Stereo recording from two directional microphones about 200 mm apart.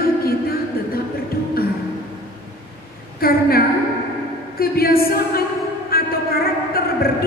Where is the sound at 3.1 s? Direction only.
50° left (ahead or behind).